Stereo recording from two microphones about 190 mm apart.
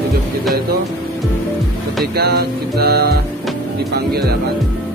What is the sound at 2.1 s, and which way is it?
Music, 55° right (ahead or behind).